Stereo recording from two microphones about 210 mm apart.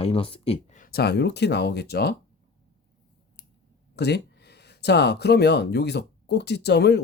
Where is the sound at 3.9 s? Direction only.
50° left (ahead or behind).